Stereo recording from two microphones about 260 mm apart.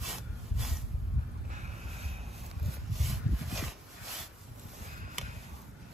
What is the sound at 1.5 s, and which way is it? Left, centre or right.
Boat, right.